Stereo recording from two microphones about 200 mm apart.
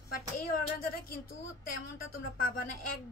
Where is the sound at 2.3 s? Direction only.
45° left (ahead or behind).